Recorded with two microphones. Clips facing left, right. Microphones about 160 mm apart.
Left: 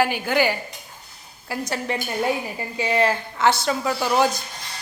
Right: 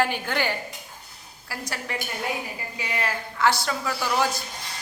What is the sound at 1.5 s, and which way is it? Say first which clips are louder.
A woman's voice: left 7 dB; 20° left (ahead or behind).